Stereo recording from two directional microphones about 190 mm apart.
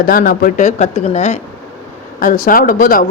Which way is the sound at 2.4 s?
45° left (ahead or behind).